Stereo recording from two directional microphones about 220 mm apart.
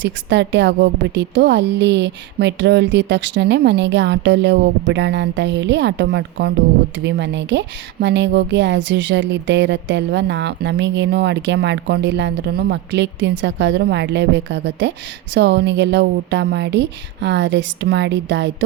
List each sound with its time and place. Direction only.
0.0 s speech: 55° right (ahead or behind)